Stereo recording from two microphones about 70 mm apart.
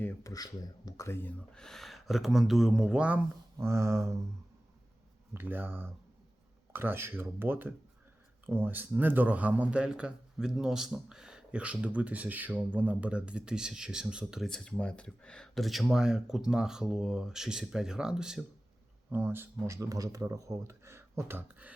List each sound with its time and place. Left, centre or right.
0.2 s speech: left
1.0 s speech: left
1.5 s speech: centre
3.6 s speech: right
5.3 s a man's voice: right; by 14.4 s centre
14.4 s speech: centre
15.6 s a man's voice: centre
19.1 s speech: right
19.6 s speech: right